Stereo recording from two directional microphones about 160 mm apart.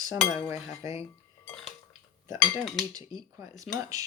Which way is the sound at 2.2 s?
20° right (ahead or behind).